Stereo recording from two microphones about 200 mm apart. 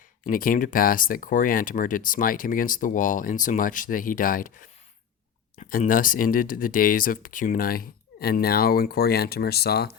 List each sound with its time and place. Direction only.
0.3 s speech: 45° left (ahead or behind)
5.5 s speech: 40° left (ahead or behind)